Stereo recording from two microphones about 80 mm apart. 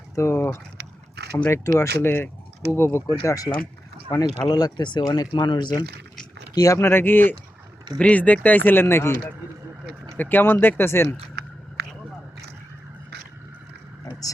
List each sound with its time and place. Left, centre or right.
0.2 s speech: left
4.1 s speech: left
5.0 s speech: left
6.5 s speech: left
6.7 s speech: left
10.2 s speech: left